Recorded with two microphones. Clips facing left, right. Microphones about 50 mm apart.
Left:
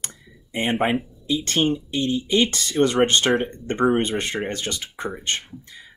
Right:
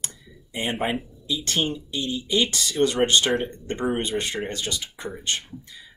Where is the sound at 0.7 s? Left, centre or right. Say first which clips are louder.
Left 5 dB; centre.